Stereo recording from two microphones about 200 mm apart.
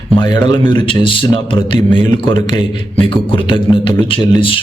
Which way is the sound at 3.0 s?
25° left (ahead or behind).